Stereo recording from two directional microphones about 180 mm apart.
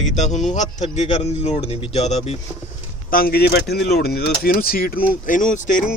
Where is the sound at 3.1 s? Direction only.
55° left (ahead or behind).